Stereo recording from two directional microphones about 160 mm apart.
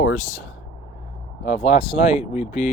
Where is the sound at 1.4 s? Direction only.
45° left (ahead or behind).